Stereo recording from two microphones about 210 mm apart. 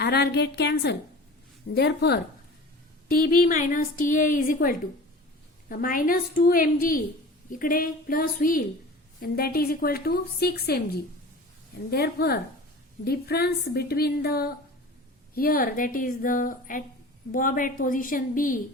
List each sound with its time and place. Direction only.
0.0 s a woman's voice: 50° left (ahead or behind)